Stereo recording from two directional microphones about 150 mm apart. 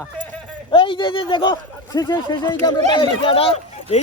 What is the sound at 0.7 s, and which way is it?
Speech, 35° left (ahead or behind).